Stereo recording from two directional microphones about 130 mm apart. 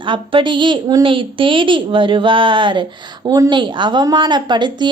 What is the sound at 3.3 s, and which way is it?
A woman's voice, 30° right (ahead or behind).